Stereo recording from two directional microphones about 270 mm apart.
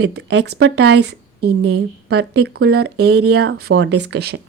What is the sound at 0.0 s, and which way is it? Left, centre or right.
Speech, right.